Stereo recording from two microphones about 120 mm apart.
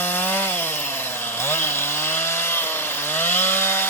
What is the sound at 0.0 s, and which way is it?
Chainsaw, 15° left (ahead or behind).